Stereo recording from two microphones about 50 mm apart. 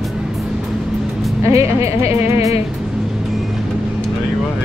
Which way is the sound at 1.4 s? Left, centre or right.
Right.